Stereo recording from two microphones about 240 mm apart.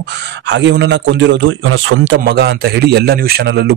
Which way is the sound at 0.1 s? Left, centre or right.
Right.